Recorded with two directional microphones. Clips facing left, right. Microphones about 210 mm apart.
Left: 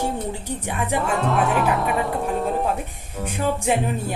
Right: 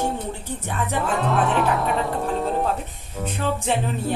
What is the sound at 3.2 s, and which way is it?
Speech, 10° left (ahead or behind).